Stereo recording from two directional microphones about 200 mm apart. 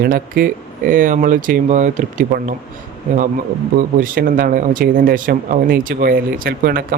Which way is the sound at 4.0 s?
45° right (ahead or behind).